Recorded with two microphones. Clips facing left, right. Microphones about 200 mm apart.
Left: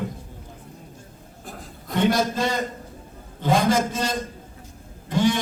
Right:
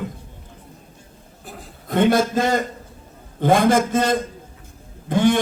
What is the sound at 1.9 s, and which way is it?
A man's voice, 50° right (ahead or behind).